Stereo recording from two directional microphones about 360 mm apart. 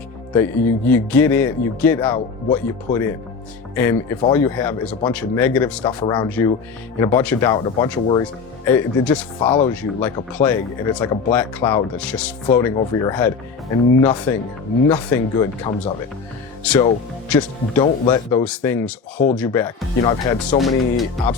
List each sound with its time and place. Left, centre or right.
0.3 s speech: centre
20.6 s speech: centre